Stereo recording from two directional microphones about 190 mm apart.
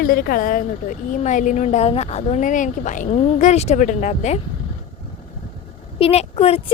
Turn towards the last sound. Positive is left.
turn(degrees=35)  # may be behind; listen again after turning